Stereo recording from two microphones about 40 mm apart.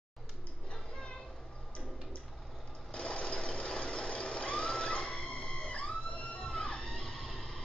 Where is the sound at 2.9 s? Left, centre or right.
Left.